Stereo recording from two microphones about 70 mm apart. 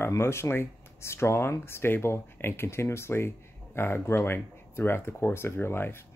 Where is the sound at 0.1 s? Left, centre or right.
Left.